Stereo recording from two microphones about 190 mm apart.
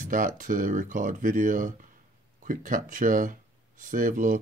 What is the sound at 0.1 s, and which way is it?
Speech, 45° right (ahead or behind).